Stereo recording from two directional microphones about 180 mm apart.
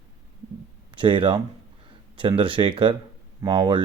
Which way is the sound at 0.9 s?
25° right (ahead or behind).